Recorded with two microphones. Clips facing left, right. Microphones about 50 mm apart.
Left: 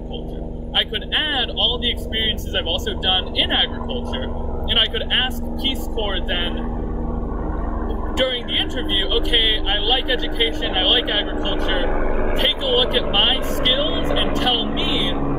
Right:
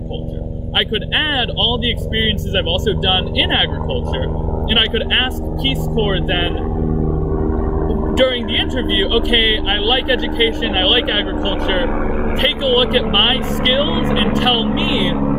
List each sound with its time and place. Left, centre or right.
0.7 s speech: right
4.7 s speech: right
8.2 s speech: right